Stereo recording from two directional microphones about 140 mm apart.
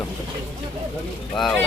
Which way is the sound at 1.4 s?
5° left (ahead or behind).